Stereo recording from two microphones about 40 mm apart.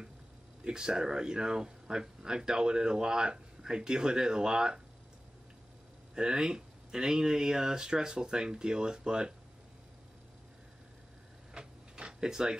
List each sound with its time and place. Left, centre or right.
0.7 s speech: centre
6.1 s speech: right
11.5 s a sound: right